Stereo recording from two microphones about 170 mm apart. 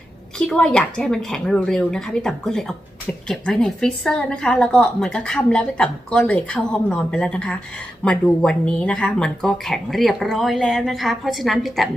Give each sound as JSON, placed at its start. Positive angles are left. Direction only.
{"t": 0.3, "sound": "a woman's voice", "side_deg": 5}